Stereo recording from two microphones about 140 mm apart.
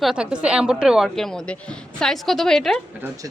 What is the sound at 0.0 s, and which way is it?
A woman's voice, 5° right (ahead or behind).